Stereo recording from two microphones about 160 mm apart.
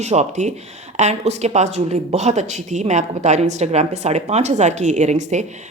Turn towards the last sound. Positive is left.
turn(degrees=-50)  # may be behind; listen again after turning